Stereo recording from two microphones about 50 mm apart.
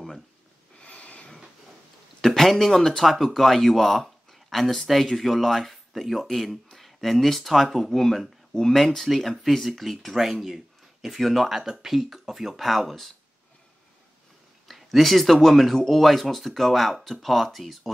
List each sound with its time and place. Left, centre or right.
0.7 s a sound: left
2.2 s speech: centre
14.7 s speech: centre